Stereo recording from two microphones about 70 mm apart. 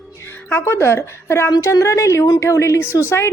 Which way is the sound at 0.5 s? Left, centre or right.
Left.